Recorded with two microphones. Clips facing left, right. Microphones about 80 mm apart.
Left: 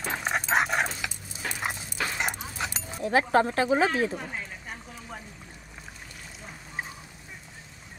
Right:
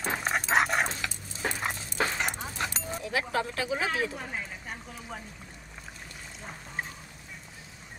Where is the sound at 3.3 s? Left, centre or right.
Left.